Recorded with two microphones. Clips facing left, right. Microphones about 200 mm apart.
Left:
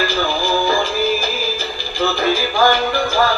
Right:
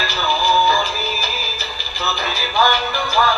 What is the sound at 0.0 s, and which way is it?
Music, 50° left (ahead or behind).